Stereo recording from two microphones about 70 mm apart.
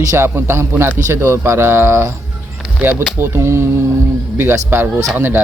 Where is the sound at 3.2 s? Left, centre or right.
Right.